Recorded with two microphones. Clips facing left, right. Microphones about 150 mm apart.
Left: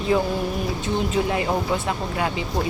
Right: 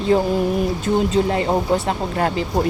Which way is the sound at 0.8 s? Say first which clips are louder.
Right 4 dB; 35° right (ahead or behind).